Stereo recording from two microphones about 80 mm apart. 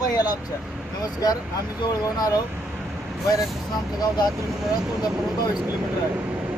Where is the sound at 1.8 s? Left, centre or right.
Left.